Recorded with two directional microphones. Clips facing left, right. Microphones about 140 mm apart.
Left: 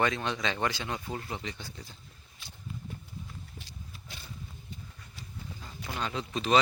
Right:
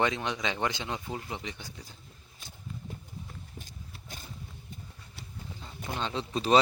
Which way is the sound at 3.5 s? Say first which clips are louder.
Right 1 dB; 45° right (ahead or behind).